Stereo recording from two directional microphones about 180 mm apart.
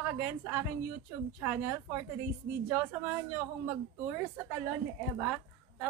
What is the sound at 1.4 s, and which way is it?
Speech, 10° right (ahead or behind).